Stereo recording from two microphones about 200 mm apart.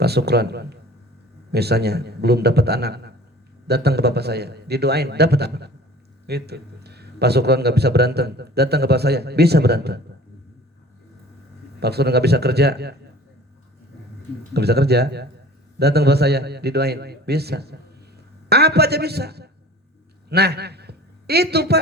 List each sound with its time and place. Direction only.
0.0 s a man's voice: 55° right (ahead or behind)
11.8 s a man's voice: 55° right (ahead or behind)
14.5 s a man's voice: 55° right (ahead or behind)